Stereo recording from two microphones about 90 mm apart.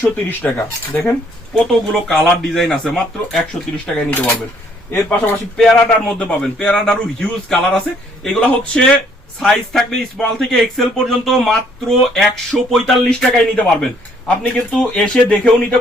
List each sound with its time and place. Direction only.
0.0 s speech: 25° left (ahead or behind)
1.5 s a man's voice: 5° left (ahead or behind)
4.9 s speech: 25° left (ahead or behind)
5.5 s a man's voice: centre (ahead or behind)